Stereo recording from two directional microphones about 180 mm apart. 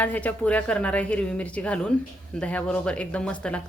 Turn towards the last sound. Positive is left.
turn(degrees=5)  # may be behind; listen again after turning